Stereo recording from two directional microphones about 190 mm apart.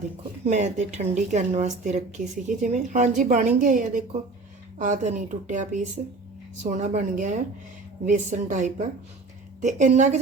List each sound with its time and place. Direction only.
0.4 s a woman's voice: 40° right (ahead or behind)